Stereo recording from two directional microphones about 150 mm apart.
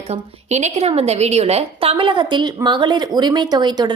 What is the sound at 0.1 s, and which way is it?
A woman's voice, 50° right (ahead or behind).